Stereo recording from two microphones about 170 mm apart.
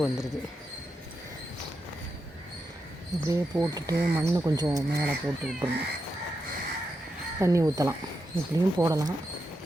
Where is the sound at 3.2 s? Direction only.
20° right (ahead or behind).